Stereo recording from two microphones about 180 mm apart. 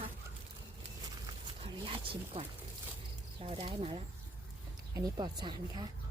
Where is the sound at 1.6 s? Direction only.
30° right (ahead or behind).